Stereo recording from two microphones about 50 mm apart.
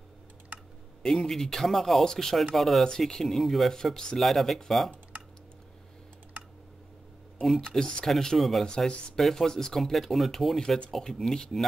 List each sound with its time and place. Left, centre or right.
1.0 s speech: centre
2.8 s speech: centre
7.5 s speech: centre
8.6 s speech: centre